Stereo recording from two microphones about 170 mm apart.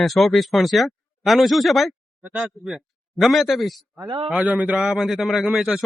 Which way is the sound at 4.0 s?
20° right (ahead or behind).